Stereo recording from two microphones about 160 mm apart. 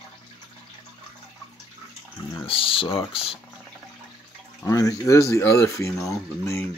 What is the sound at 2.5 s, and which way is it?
Speech, 35° left (ahead or behind).